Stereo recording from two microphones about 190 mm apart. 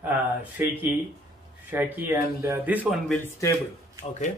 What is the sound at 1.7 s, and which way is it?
Speech, 10° right (ahead or behind).